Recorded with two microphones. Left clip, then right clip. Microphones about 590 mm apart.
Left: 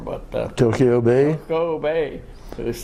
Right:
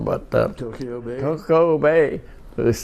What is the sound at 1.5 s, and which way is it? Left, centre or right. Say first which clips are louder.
Speech: right 5 dB; right.